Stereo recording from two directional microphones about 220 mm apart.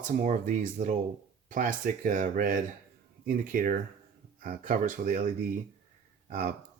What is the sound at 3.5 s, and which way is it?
Speech, 40° right (ahead or behind).